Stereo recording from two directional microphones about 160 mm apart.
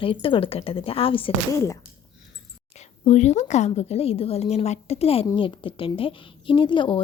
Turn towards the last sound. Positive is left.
turn(degrees=30)  # may be behind; listen again after turning